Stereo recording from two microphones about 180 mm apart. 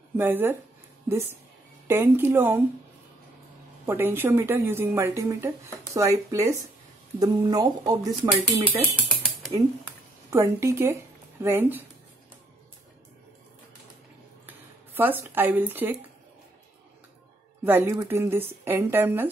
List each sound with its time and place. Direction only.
0.2 s a woman's voice: 10° right (ahead or behind)
1.9 s a woman's voice: 15° right (ahead or behind)
3.8 s a woman's voice: 15° right (ahead or behind)
8.2 s speech: 10° right (ahead or behind)
10.3 s a woman's voice: 15° right (ahead or behind)
14.4 s speech: 10° right (ahead or behind)
17.6 s a woman's voice: 10° right (ahead or behind)